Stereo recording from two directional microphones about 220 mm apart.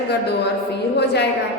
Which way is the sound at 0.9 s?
50° left (ahead or behind).